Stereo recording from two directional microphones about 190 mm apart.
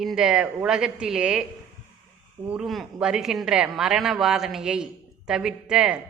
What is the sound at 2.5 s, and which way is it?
A man's voice, centre (ahead or behind).